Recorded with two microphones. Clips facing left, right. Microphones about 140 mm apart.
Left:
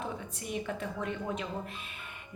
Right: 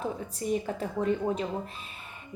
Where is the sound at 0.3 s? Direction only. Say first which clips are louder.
Right 7 dB; 35° right (ahead or behind).